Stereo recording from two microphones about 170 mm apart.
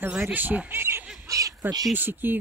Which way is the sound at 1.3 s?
20° right (ahead or behind).